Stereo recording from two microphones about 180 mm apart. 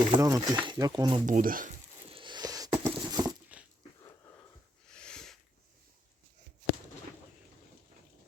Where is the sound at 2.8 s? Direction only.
20° right (ahead or behind).